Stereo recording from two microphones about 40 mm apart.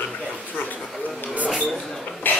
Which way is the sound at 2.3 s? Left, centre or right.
Left.